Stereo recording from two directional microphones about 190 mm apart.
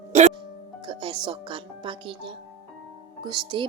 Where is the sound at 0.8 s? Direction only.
25° right (ahead or behind).